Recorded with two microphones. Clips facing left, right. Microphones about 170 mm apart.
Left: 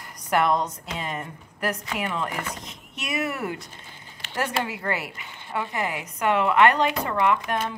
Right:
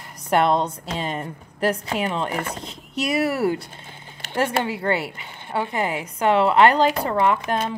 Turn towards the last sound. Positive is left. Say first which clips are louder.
# right 2 dB
turn(degrees=-30)  # may be behind; listen again after turning